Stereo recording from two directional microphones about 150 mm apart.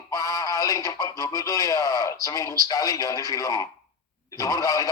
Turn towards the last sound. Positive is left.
turn(degrees=25)  # may be behind; listen again after turning